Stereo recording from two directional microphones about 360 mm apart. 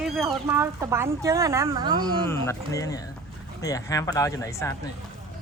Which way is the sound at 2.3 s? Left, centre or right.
Centre.